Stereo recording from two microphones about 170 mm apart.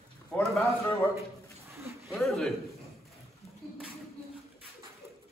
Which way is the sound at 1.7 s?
15° right (ahead or behind).